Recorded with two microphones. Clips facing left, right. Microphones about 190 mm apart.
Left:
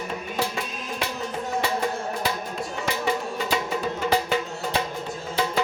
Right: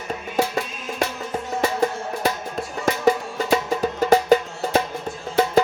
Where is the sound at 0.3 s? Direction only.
45° right (ahead or behind).